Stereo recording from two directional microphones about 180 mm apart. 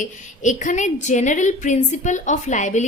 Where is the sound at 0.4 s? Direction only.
45° left (ahead or behind).